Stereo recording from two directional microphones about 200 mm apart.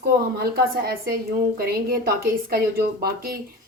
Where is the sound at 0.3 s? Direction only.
50° right (ahead or behind).